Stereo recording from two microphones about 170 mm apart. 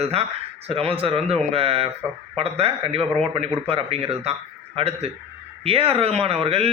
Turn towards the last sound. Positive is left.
turn(degrees=-35)  # may be behind; listen again after turning